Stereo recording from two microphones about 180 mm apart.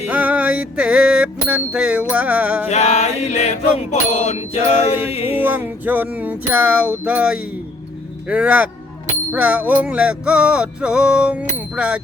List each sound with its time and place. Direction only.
0.1 s music: 10° right (ahead or behind)
2.6 s a sound: 40° left (ahead or behind)
5.4 s music: 10° right (ahead or behind)